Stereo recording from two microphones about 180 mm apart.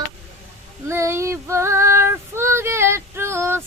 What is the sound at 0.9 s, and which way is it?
Female singing, 15° right (ahead or behind).